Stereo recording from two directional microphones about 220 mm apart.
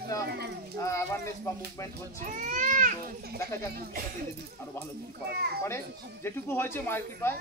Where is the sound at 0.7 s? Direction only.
15° left (ahead or behind).